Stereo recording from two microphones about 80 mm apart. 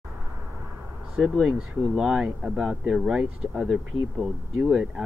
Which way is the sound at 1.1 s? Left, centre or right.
Centre.